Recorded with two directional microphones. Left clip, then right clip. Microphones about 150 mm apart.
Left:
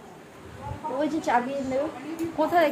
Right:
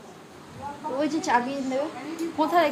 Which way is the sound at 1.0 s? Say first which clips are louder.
Right 1 dB; 15° left (ahead or behind).